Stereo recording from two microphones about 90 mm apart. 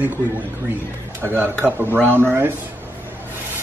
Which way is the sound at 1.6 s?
25° right (ahead or behind).